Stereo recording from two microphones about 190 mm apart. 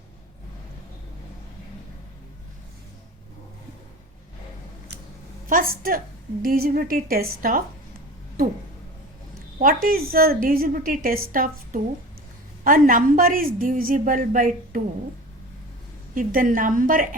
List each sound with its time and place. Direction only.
5.5 s a woman's voice: 45° right (ahead or behind)
9.6 s a woman's voice: 50° right (ahead or behind)
16.1 s a woman's voice: 45° right (ahead or behind)